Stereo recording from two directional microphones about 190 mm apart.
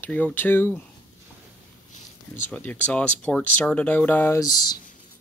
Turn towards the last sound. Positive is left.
turn(degrees=20)  # may be behind; listen again after turning